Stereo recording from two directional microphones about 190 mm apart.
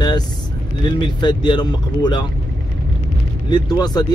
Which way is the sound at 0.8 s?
25° left (ahead or behind).